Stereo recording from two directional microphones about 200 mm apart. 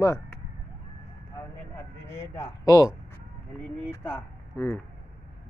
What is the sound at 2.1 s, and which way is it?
Speech, 15° left (ahead or behind).